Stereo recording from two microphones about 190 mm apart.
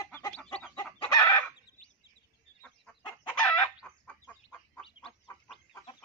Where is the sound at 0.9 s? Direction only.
20° left (ahead or behind).